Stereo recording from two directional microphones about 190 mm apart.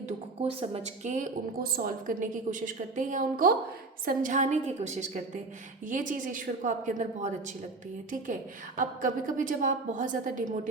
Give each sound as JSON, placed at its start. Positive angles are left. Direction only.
{"t": 0.4, "sound": "a woman's voice", "side_deg": -30}